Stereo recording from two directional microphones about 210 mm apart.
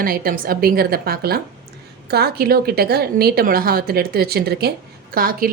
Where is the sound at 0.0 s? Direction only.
45° right (ahead or behind).